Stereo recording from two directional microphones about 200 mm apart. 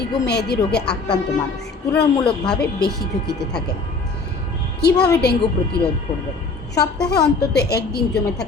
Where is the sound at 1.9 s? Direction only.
5° left (ahead or behind).